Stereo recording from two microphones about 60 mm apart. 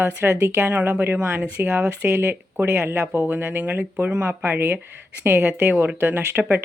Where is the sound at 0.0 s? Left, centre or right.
Right.